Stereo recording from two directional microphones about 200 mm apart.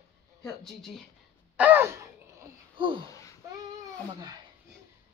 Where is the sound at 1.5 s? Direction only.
10° right (ahead or behind); by 3.0 s 25° right (ahead or behind).